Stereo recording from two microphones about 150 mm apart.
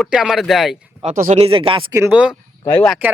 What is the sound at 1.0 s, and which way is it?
Speech, 55° right (ahead or behind).